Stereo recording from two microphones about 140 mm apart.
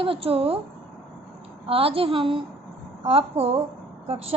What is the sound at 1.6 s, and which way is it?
A woman's voice, 40° right (ahead or behind).